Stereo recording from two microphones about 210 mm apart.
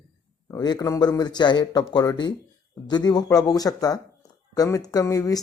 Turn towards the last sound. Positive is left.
turn(degrees=15)  # may be behind; listen again after turning